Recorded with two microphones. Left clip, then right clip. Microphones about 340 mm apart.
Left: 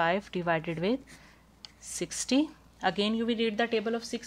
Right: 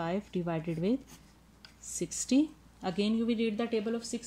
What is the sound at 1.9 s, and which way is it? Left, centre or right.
A woman's voice, left.